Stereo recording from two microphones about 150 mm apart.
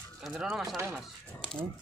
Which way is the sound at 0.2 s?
Centre (ahead or behind).